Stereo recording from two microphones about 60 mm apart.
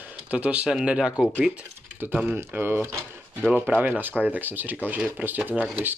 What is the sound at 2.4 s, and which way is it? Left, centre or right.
Speech, right.